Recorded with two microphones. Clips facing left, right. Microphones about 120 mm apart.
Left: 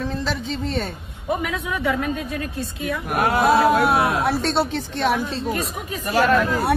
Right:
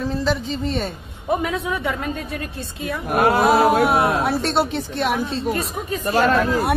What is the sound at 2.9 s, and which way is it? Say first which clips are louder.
Speech: right 3 dB; 30° right (ahead or behind).